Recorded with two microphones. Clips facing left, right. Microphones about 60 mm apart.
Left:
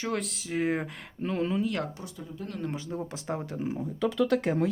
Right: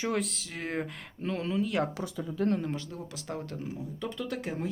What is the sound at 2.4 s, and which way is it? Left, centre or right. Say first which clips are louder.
Speech: right 13 dB; right.